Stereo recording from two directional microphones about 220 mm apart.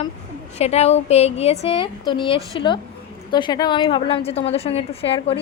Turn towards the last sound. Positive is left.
turn(degrees=25)  # may be behind; listen again after turning